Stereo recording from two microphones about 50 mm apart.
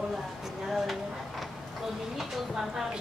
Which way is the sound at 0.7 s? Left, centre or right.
Centre.